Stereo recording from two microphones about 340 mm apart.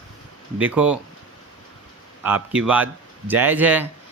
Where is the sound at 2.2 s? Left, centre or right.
Centre.